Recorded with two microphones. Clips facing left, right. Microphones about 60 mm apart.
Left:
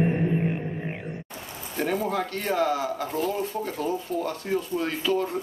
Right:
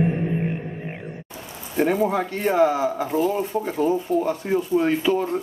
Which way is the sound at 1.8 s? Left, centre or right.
Centre.